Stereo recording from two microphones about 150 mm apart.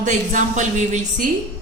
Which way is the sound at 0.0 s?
55° right (ahead or behind).